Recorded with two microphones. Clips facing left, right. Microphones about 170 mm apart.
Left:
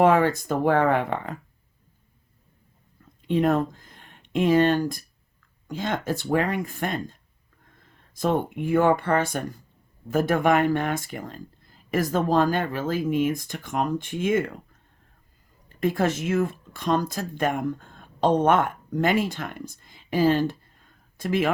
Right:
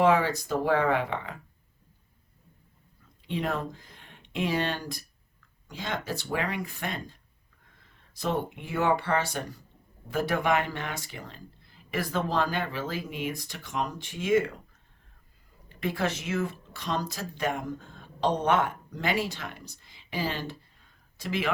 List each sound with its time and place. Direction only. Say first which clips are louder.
0.0 s speech: left 4 dB; 50° left (ahead or behind)
3.2 s speech: left 9 dB; 45° left (ahead or behind)
15.7 s speech: left 6 dB; 45° left (ahead or behind)